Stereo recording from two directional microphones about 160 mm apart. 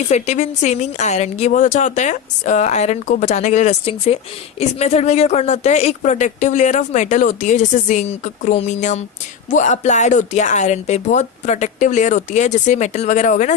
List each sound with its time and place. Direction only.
0.1 s speech: 45° left (ahead or behind)